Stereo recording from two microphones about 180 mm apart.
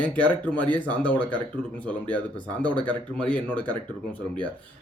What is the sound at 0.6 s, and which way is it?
Speech, 10° left (ahead or behind).